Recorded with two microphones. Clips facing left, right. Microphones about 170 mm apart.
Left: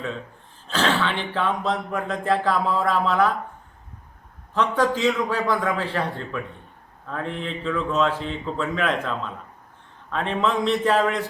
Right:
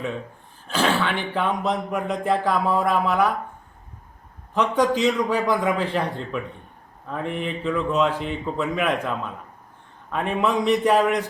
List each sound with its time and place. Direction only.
0.7 s speech: 10° right (ahead or behind)
4.5 s speech: 15° right (ahead or behind)